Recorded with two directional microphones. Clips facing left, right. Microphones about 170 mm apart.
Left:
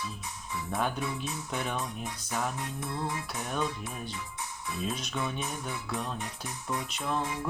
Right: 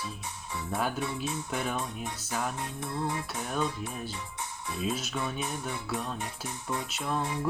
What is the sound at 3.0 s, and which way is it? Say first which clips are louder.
Music: right 2 dB; 30° right (ahead or behind).